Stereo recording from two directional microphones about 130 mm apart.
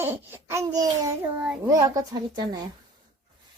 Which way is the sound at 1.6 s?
25° right (ahead or behind).